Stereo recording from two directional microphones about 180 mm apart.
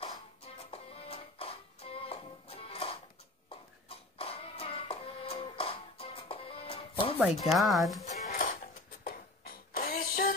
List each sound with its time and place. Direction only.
0.7 s music: 30° left (ahead or behind)
4.2 s music: 30° left (ahead or behind)
7.4 s speech: centre (ahead or behind)
8.0 s music: 45° left (ahead or behind)
9.0 s a sound: 55° left (ahead or behind)